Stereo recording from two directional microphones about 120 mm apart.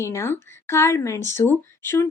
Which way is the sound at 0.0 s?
25° left (ahead or behind).